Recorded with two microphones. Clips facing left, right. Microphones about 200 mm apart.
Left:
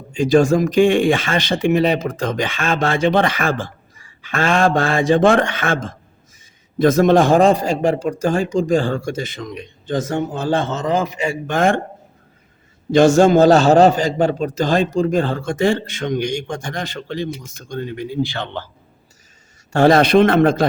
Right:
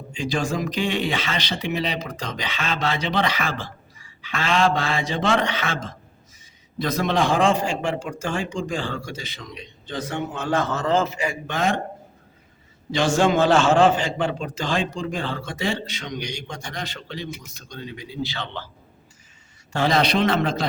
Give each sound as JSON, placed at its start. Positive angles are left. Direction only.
{"t": 0.1, "sound": "speech", "side_deg": 45}
{"t": 11.4, "sound": "speech", "side_deg": 50}
{"t": 12.9, "sound": "speech", "side_deg": 45}
{"t": 19.7, "sound": "speech", "side_deg": 50}